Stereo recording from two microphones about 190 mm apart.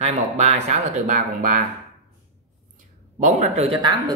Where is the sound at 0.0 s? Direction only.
35° right (ahead or behind).